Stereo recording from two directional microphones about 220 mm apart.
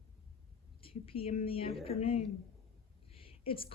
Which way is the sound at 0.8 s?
25° left (ahead or behind).